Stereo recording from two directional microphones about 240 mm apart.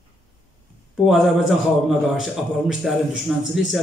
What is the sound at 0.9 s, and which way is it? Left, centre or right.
A man's voice, centre.